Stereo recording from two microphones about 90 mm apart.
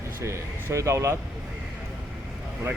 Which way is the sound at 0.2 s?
35° right (ahead or behind).